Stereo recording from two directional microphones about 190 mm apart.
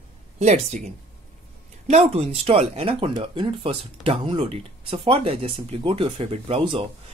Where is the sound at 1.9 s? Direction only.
35° right (ahead or behind).